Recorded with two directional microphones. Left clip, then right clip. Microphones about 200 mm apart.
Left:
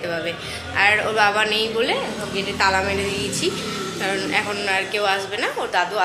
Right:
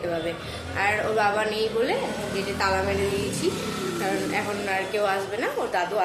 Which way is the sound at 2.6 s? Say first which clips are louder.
Left 6 dB; 15° left (ahead or behind).